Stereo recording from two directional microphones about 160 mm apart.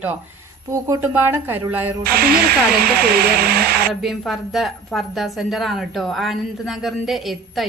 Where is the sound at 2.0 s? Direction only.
70° right (ahead or behind).